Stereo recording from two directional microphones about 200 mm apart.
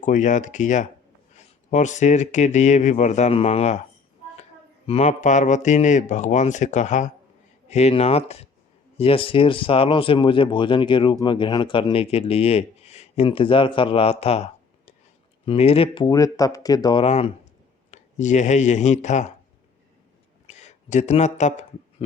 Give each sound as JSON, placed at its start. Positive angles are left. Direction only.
{"t": 0.0, "sound": "speech", "side_deg": 40}
{"t": 4.9, "sound": "speech", "side_deg": 35}
{"t": 20.5, "sound": "a sound", "side_deg": 35}